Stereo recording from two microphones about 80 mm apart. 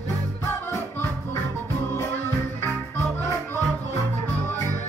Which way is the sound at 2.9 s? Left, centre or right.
Left.